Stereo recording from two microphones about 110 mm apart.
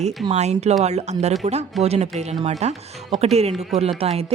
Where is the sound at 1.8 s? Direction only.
70° right (ahead or behind).